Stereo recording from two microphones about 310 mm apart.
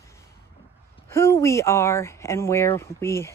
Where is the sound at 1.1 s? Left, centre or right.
Centre.